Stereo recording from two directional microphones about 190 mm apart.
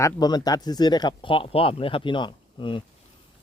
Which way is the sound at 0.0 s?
20° left (ahead or behind).